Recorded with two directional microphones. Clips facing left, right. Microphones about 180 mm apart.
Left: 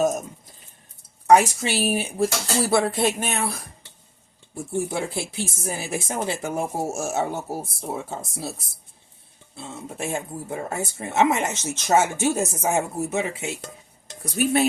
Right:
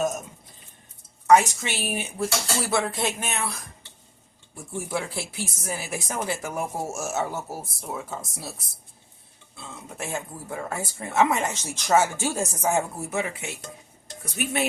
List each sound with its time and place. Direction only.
1.3 s speech: 35° left (ahead or behind)
4.7 s speech: 25° left (ahead or behind)
9.6 s speech: 30° left (ahead or behind)
14.3 s speech: 35° left (ahead or behind)